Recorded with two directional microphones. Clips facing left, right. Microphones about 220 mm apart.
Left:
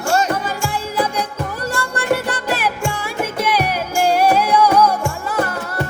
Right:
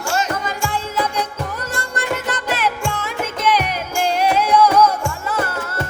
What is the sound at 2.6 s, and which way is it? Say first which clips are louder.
Music: even; 10° left (ahead or behind).